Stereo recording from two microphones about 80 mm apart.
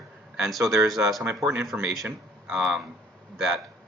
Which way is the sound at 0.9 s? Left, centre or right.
Centre.